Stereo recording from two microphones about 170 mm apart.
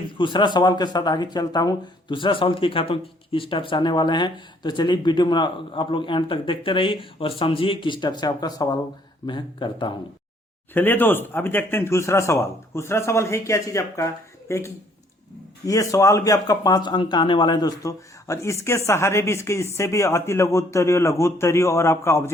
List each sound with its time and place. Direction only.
0.2 s speech: 25° left (ahead or behind)
10.8 s a man's voice: 10° left (ahead or behind)